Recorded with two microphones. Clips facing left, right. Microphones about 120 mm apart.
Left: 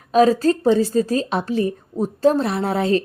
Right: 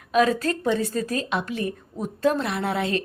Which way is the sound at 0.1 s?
30° left (ahead or behind).